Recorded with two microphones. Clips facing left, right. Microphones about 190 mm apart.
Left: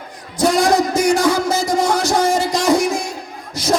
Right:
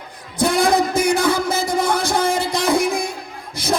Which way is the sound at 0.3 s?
55° right (ahead or behind).